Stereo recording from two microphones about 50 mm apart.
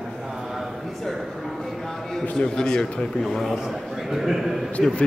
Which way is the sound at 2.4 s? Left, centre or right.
Centre.